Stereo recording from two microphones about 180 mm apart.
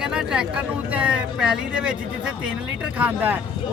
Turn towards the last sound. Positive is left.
turn(degrees=-10)  # may be behind; listen again after turning